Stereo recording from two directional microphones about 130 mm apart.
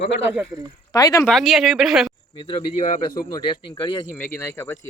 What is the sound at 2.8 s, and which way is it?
Speech, 70° left (ahead or behind).